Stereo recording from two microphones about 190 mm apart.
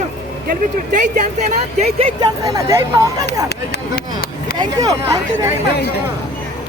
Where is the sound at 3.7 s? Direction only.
55° left (ahead or behind).